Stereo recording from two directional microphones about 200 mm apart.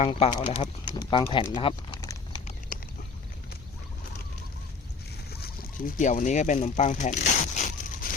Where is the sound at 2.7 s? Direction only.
45° left (ahead or behind).